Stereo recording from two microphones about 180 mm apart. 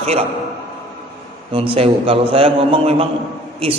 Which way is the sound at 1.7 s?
30° right (ahead or behind).